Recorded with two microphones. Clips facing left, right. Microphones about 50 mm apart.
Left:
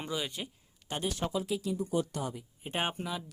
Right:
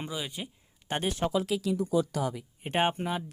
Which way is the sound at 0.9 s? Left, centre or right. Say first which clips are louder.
Right 4 dB; right.